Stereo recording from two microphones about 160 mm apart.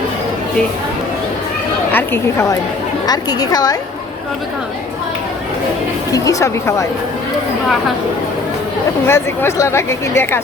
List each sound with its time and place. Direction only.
1.9 s a woman's voice: 15° left (ahead or behind)
6.1 s a woman's voice: 20° left (ahead or behind)
9.0 s speech: 15° left (ahead or behind)